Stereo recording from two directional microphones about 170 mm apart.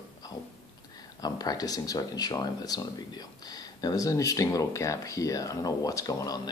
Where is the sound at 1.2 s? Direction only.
20° left (ahead or behind).